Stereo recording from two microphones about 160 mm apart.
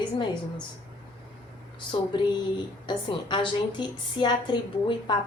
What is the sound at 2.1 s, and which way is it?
A woman's voice, 25° left (ahead or behind).